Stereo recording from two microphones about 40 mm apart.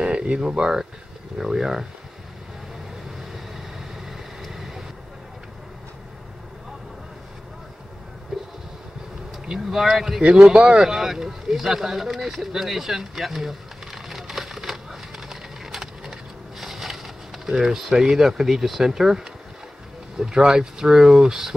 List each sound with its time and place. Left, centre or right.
0.0 s speech: right; by 1.9 s centre
4.5 s vehicle: centre
8.3 s a sound: centre
9.7 s speech: centre
10.2 s speech: right; by 13.6 s centre
14.0 s a sound: centre
17.9 s speech: centre